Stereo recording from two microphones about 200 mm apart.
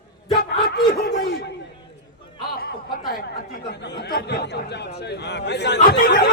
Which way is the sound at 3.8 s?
60° left (ahead or behind).